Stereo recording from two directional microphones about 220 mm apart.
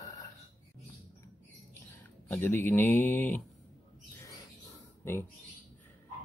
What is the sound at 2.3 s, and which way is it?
Speech, 10° left (ahead or behind).